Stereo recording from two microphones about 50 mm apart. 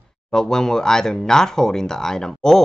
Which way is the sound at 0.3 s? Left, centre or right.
Centre.